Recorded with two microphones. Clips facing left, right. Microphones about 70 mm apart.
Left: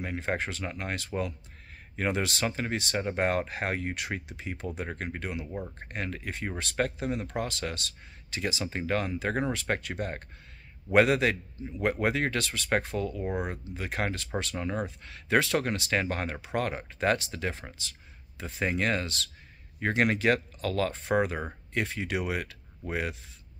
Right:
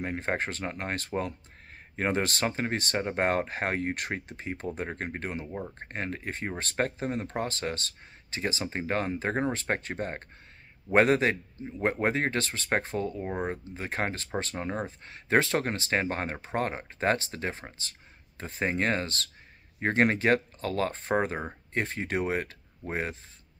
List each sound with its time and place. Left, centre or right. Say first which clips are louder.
0.0 s speech: right 1 dB; right
5.5 s speech: even; centre
5.8 s speech: right 1 dB; right